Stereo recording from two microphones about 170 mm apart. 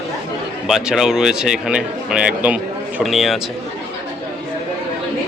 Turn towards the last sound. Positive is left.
turn(degrees=0)  # may be behind; listen again after turning